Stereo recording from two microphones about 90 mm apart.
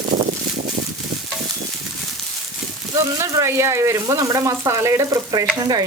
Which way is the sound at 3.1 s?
35° right (ahead or behind).